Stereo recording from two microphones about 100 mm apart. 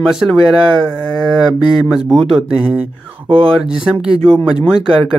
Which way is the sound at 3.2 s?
55° right (ahead or behind).